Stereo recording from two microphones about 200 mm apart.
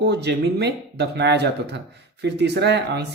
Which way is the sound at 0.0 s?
55° right (ahead or behind).